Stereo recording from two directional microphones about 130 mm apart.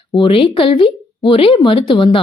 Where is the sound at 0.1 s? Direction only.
40° left (ahead or behind).